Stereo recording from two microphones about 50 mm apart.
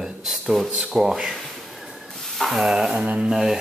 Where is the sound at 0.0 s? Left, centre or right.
Centre.